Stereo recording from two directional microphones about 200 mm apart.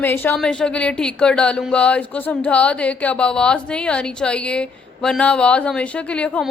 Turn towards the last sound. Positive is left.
turn(degrees=5)  # may be behind; listen again after turning